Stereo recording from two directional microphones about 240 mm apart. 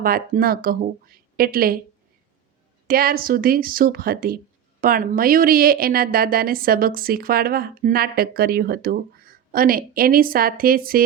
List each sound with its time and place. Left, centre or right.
0.0 s a woman's voice: right
2.8 s a woman's voice: right